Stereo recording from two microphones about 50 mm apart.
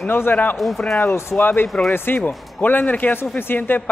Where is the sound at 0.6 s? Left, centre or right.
Centre.